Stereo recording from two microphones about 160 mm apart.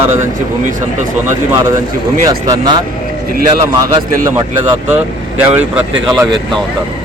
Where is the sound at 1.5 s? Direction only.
20° right (ahead or behind).